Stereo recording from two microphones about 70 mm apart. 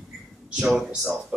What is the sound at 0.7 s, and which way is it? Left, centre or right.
Speech, centre.